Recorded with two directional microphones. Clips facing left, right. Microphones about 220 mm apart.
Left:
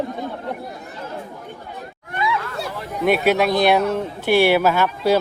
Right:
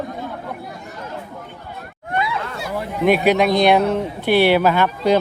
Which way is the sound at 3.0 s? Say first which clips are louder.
Right 2 dB; centre (ahead or behind).